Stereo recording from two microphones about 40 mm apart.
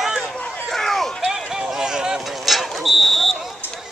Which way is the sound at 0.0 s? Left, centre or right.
Centre.